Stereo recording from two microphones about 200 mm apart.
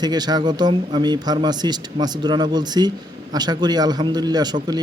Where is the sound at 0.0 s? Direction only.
20° right (ahead or behind).